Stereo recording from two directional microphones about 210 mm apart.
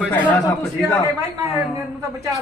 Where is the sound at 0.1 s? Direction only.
10° left (ahead or behind).